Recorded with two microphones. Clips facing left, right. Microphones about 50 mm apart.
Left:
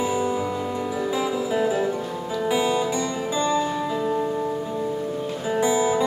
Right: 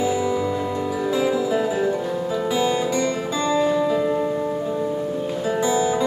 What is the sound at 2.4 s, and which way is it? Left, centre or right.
Music, centre.